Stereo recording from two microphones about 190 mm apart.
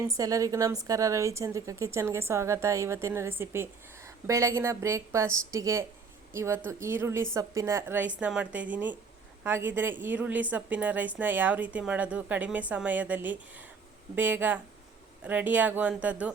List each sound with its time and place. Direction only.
0.1 s a woman's voice: 15° right (ahead or behind)